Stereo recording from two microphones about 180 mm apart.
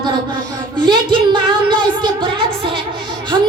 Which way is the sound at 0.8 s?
25° right (ahead or behind).